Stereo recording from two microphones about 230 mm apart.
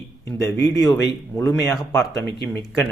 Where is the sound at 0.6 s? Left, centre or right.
Centre.